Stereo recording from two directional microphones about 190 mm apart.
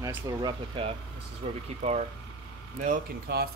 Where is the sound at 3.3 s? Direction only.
55° right (ahead or behind).